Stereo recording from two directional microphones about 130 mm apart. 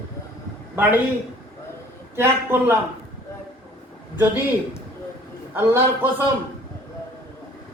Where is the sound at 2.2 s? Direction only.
15° right (ahead or behind).